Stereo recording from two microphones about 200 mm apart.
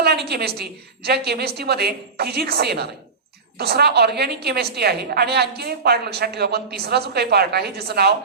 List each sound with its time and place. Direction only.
0.0 s a woman's voice: 55° right (ahead or behind)